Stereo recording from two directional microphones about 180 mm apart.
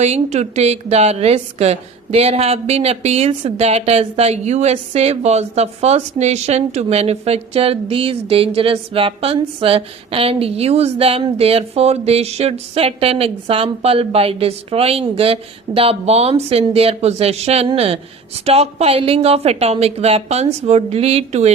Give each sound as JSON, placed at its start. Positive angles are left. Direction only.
{"t": 0.0, "sound": "a woman's voice", "side_deg": -40}